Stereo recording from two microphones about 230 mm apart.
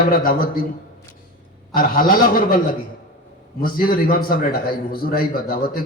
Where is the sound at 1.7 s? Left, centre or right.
Left.